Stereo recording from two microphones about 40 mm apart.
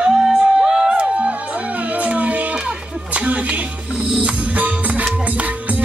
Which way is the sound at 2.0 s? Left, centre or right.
Right.